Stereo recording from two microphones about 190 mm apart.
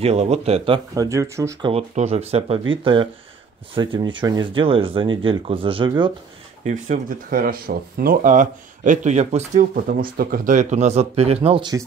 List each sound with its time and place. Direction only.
0.0 s speech: 35° right (ahead or behind)
0.9 s speech: 15° right (ahead or behind)
1.7 s speech: 35° right (ahead or behind)
6.6 s speech: 40° right (ahead or behind)
9.8 s speech: 50° right (ahead or behind); by 11.8 s 25° right (ahead or behind)